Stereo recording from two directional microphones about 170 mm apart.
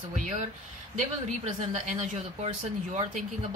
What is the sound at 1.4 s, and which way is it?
Speech, 45° right (ahead or behind).